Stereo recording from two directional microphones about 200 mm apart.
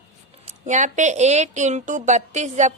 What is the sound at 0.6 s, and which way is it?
A woman's voice, 40° right (ahead or behind).